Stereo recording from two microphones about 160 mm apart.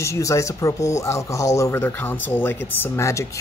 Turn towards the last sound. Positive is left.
turn(degrees=20)  # may be behind; listen again after turning